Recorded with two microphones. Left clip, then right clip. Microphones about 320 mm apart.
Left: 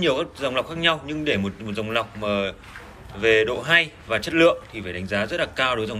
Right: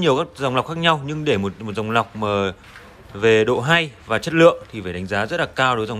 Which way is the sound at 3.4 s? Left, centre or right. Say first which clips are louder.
Right 5 dB; centre.